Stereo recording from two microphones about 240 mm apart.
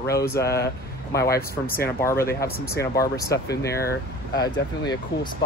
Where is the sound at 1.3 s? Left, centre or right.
Left.